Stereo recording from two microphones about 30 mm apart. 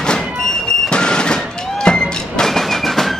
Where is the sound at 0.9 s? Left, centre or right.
Left.